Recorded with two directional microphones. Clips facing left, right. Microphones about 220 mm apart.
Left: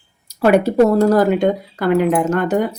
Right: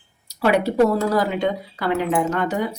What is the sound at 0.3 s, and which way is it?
Speech, 50° left (ahead or behind).